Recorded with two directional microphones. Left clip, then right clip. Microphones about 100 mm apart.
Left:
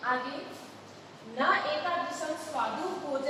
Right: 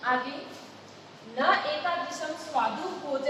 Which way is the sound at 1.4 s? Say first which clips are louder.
Right 2 dB; 35° right (ahead or behind).